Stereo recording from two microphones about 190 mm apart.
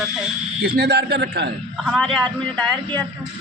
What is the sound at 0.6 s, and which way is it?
Speech, 60° right (ahead or behind).